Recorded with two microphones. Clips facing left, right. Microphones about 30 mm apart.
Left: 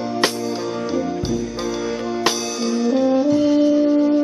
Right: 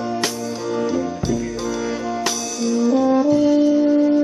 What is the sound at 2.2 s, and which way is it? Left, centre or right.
Music, left.